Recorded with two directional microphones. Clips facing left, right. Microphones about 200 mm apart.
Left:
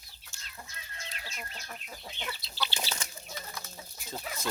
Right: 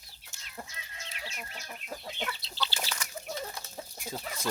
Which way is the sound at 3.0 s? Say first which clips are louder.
Right 1 dB; 25° left (ahead or behind).